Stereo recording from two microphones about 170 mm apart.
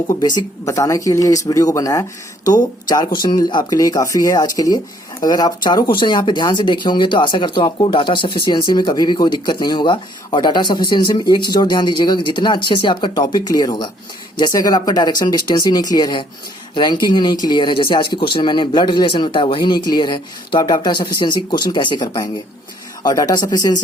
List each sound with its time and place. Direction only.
0.1 s speech: 25° left (ahead or behind)